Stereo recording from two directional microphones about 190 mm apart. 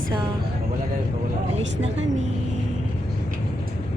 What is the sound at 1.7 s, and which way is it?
Speech, 80° right.